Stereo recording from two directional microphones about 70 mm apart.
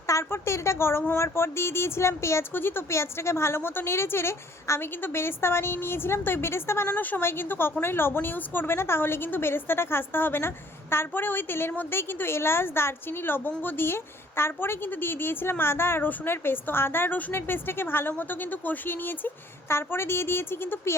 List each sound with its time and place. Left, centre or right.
0.1 s a woman's voice: left